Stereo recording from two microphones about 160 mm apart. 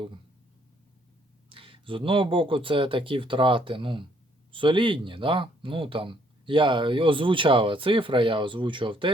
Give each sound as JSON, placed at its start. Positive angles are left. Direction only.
{"t": 1.5, "sound": "speech", "side_deg": -35}